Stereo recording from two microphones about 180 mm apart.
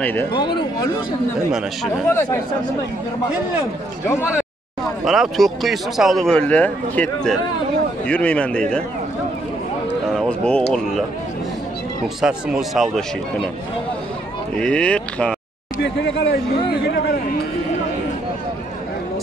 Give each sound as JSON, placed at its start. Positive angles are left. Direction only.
{"t": 0.0, "sound": "a man's voice", "side_deg": 10}
{"t": 2.0, "sound": "a man's voice", "side_deg": 15}
{"t": 5.0, "sound": "a man's voice", "side_deg": 0}
{"t": 10.1, "sound": "a sound", "side_deg": 5}
{"t": 12.2, "sound": "speech", "side_deg": -5}
{"t": 14.6, "sound": "speech", "side_deg": 5}
{"t": 15.8, "sound": "speech", "side_deg": 70}